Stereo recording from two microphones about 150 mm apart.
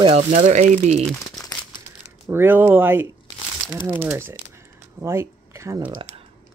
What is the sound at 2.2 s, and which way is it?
Speech, 15° right (ahead or behind).